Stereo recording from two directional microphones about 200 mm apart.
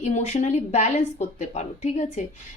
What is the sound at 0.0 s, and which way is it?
Speech, 35° left (ahead or behind).